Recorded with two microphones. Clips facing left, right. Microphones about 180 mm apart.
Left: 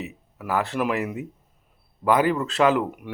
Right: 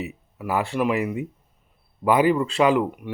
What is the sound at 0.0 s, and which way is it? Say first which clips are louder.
Speech: right 3 dB; centre (ahead or behind).